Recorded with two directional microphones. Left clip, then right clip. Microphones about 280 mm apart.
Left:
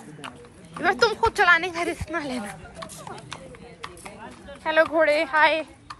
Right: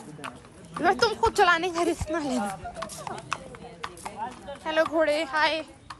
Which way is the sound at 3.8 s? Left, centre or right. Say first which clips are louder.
Right 5 dB; right.